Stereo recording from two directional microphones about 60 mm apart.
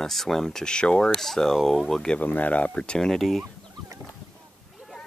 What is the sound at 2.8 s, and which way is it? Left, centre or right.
Speech, centre.